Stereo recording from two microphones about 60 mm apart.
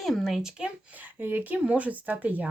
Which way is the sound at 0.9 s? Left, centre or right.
Right.